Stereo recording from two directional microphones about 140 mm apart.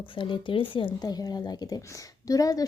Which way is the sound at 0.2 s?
35° left (ahead or behind).